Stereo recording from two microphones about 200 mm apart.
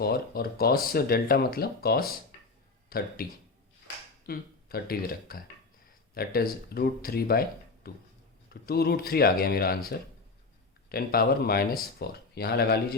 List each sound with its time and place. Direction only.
0.0 s speech: 50° left (ahead or behind)
4.3 s speech: 50° left (ahead or behind)